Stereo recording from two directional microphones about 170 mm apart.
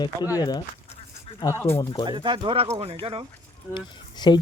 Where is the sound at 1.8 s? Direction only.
25° left (ahead or behind).